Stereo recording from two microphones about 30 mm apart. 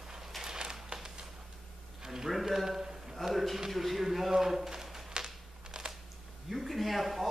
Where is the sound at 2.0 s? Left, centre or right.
Centre.